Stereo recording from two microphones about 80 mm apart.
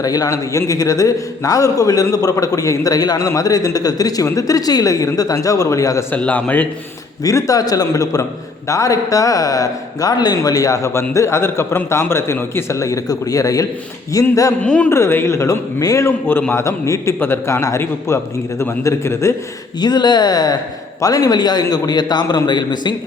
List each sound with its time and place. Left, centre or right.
0.0 s a man's voice: left
6.1 s a man's voice: centre
7.3 s a man's voice: left
14.6 s speech: centre
14.8 s a man's voice: left
15.8 s a man's voice: left
16.5 s a man's voice: left
17.2 s a man's voice: left
19.8 s a man's voice: left